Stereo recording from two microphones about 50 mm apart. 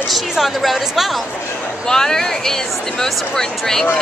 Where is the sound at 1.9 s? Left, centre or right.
Centre.